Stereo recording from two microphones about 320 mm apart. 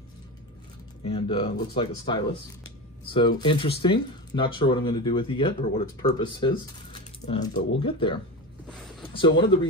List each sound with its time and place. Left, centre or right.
1.0 s speech: centre